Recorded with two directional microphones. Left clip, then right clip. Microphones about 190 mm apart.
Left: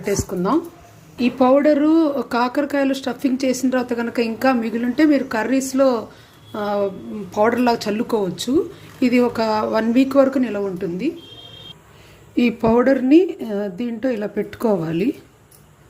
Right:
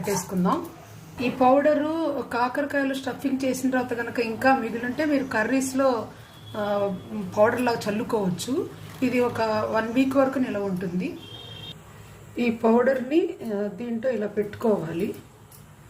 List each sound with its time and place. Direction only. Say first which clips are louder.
0.0 s a woman's voice: left 5 dB; 45° left (ahead or behind)
12.4 s a woman's voice: left 5 dB; 45° left (ahead or behind)